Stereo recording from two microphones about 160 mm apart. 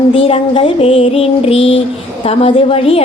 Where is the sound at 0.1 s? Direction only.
35° left (ahead or behind).